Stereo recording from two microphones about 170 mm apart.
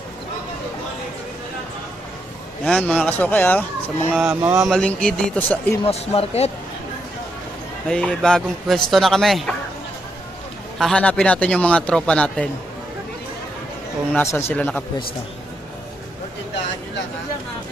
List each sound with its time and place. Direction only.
2.6 s speech: 5° left (ahead or behind)
4.1 s speech: 5° right (ahead or behind)
4.7 s speech: 5° left (ahead or behind)
5.8 s speech: 35° left (ahead or behind)
7.9 s speech: 5° left (ahead or behind)
10.8 s speech: 5° left (ahead or behind)
14.1 s speech: 15° left (ahead or behind)